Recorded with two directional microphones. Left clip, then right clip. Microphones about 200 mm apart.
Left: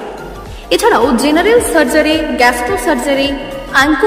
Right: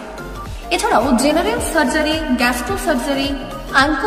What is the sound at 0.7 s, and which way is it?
A woman's voice, 15° left (ahead or behind).